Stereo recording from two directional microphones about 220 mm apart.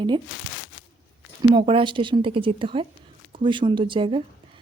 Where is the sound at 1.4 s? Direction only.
25° right (ahead or behind).